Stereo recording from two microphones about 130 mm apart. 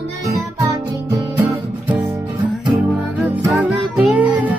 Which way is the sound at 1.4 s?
10° right (ahead or behind).